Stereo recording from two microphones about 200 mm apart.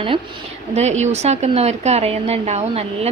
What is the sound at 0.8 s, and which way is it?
A woman's voice, 35° right (ahead or behind).